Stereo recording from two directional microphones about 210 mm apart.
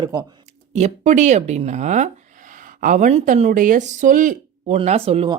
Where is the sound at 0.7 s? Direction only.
35° right (ahead or behind).